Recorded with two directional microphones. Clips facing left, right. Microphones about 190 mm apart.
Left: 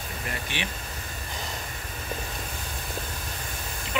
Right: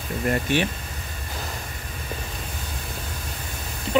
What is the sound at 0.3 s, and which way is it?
Speech, 45° right (ahead or behind).